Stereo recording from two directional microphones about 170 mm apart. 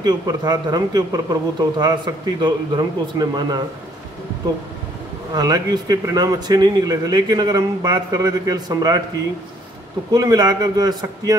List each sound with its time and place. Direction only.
0.0 s speech: 25° right (ahead or behind)
5.3 s speech: 20° right (ahead or behind)
10.1 s speech: 20° right (ahead or behind)